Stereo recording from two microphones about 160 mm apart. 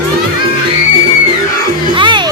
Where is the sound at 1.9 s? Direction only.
30° right (ahead or behind).